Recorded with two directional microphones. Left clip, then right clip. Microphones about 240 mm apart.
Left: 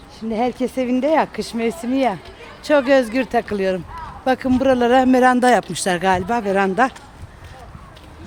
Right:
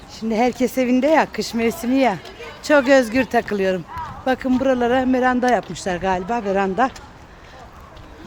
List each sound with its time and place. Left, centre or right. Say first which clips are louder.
0.2 s speech: right 2 dB; centre
4.3 s speech: left 2 dB; centre
4.6 s speech: left 4 dB; left